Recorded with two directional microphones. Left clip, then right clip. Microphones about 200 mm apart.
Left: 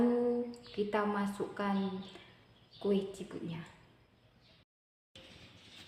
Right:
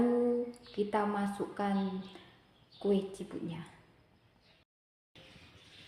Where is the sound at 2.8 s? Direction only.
15° right (ahead or behind).